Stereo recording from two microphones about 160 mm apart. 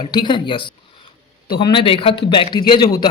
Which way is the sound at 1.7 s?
35° left (ahead or behind).